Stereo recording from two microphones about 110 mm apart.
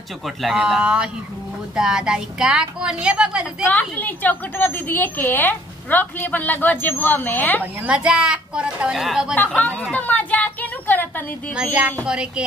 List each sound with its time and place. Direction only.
0.2 s speech: centre (ahead or behind)
3.6 s a woman's voice: 15° left (ahead or behind)
7.6 s speech: 10° right (ahead or behind)
9.9 s a sound: 15° left (ahead or behind)
12.1 s speech: 10° right (ahead or behind)